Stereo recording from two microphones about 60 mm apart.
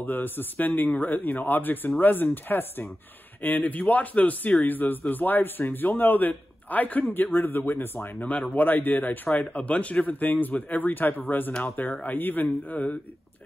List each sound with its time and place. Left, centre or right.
0.0 s speech: left
8.3 s speech: left